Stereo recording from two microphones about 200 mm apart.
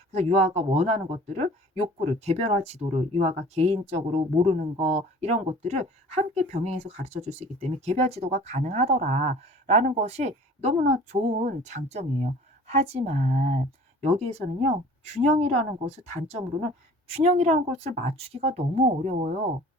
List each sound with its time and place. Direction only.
0.1 s speech: 35° right (ahead or behind)